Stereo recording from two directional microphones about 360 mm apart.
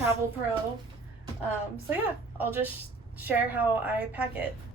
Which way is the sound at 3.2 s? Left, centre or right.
Centre.